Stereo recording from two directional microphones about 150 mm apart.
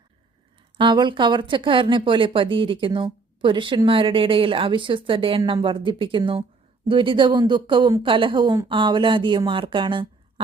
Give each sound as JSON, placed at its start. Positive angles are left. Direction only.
{"t": 0.8, "sound": "speech", "side_deg": -30}